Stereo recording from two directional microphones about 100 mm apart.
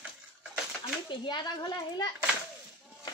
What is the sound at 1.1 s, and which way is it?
Speech, 50° left (ahead or behind).